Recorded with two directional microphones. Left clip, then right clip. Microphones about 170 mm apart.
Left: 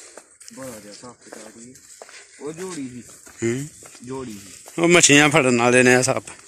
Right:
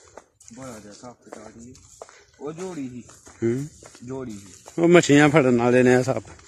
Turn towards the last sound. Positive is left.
turn(degrees=-15)  # may be behind; listen again after turning